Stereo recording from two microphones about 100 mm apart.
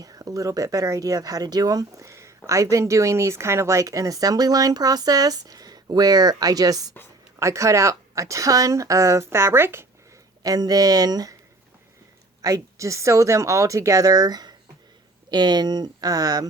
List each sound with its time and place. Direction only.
0.0 s speech: 40° right (ahead or behind)
10.4 s speech: 40° right (ahead or behind)
12.4 s speech: 35° right (ahead or behind)